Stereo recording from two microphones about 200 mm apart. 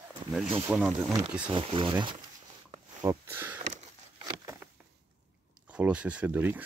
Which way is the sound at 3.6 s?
35° right (ahead or behind).